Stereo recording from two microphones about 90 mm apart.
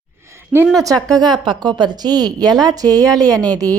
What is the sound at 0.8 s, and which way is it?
A woman's voice, 40° right (ahead or behind).